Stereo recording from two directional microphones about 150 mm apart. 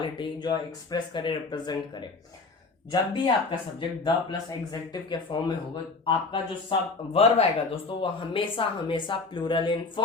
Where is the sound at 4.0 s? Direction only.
30° left (ahead or behind).